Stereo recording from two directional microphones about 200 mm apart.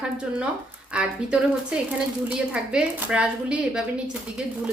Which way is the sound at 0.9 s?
5° right (ahead or behind).